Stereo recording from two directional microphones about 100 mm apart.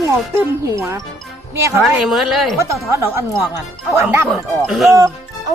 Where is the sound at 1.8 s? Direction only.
5° right (ahead or behind).